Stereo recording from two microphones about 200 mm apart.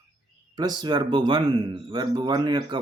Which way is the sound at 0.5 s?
20° right (ahead or behind).